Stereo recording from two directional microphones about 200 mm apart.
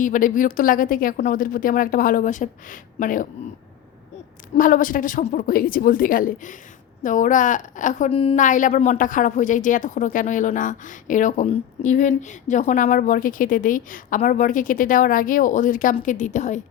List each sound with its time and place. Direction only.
0.0 s a woman's voice: 40° left (ahead or behind)
4.5 s a woman's voice: 40° left (ahead or behind)